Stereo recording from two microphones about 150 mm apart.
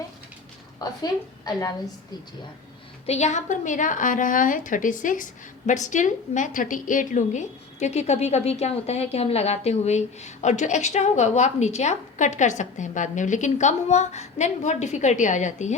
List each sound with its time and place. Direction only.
0.8 s a woman's voice: 25° left (ahead or behind)
3.1 s a woman's voice: 50° left (ahead or behind)